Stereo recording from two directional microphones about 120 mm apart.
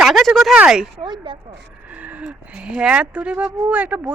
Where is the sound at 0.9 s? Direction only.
40° right (ahead or behind).